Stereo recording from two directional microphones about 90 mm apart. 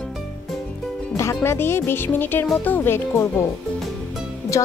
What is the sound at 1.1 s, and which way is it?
Speech, 30° left (ahead or behind).